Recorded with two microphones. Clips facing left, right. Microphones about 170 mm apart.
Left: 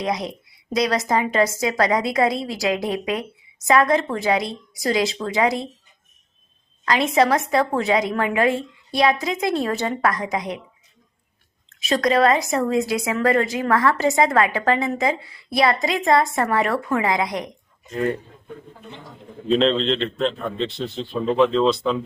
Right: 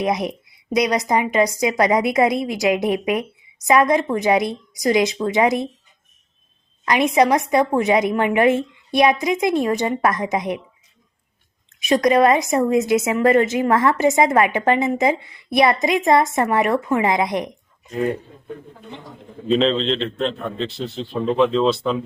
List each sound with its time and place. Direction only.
0.0 s a woman's voice: 20° right (ahead or behind)
6.8 s a woman's voice: 20° right (ahead or behind)
11.8 s a woman's voice: 20° right (ahead or behind)
19.5 s a man's voice: centre (ahead or behind)